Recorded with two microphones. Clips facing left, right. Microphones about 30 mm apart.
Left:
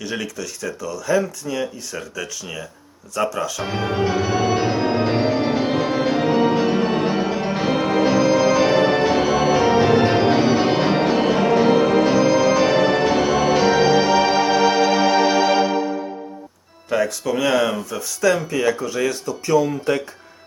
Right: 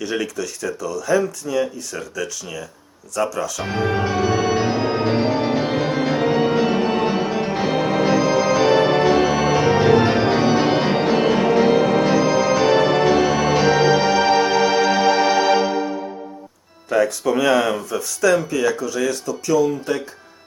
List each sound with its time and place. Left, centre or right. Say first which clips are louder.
0.0 s speech: right 3 dB; centre
3.6 s music: right 1 dB; centre
16.9 s speech: right 2 dB; centre
18.5 s speech: even; left